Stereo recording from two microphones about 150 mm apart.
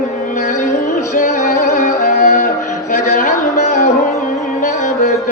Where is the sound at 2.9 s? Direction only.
55° left (ahead or behind).